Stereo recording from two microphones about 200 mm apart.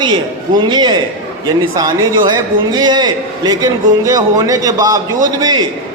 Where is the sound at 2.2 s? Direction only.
20° right (ahead or behind).